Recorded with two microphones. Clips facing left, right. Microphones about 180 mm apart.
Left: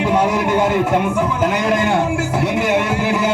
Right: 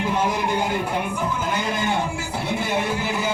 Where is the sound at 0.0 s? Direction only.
75° left (ahead or behind).